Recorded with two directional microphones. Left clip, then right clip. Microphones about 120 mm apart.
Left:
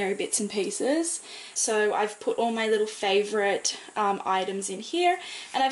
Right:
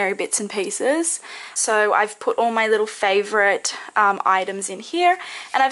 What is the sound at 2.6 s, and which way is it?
Speech, 35° right (ahead or behind).